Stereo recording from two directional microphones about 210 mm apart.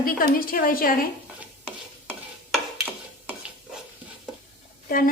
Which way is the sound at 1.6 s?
5° right (ahead or behind).